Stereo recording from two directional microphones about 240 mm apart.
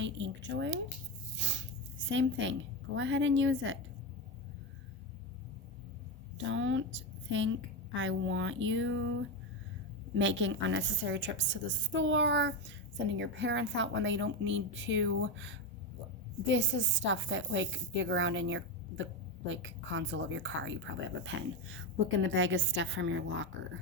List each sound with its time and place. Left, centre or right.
0.0 s a woman's voice: right
1.4 s a sound: right
2.0 s a woman's voice: right
6.3 s a woman's voice: right
10.2 s a woman's voice: right